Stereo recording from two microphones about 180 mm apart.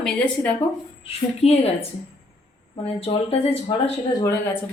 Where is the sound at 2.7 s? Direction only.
30° left (ahead or behind).